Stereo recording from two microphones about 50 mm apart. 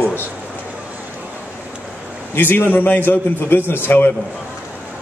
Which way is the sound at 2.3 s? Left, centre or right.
Left.